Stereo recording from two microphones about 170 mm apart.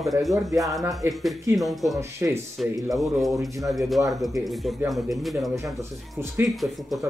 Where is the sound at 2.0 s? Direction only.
15° right (ahead or behind).